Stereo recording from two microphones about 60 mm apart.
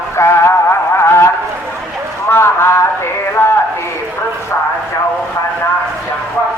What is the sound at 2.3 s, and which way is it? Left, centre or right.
Speech, left.